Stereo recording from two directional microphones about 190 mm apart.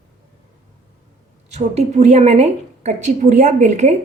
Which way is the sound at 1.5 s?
35° right (ahead or behind).